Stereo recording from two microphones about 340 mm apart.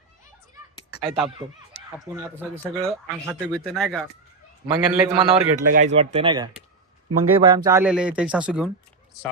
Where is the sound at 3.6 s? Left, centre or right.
Centre.